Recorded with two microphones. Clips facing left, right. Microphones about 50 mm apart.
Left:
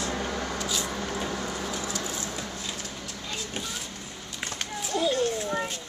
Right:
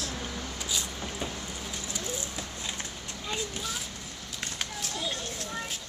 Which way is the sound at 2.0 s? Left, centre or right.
Left.